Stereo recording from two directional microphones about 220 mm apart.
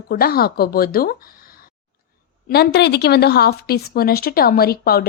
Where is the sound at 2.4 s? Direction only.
45° left (ahead or behind).